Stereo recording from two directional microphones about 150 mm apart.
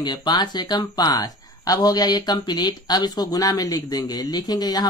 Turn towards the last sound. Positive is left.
turn(degrees=25)  # may be behind; listen again after turning